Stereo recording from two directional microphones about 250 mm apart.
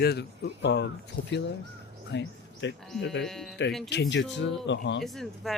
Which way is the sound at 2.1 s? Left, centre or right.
Left.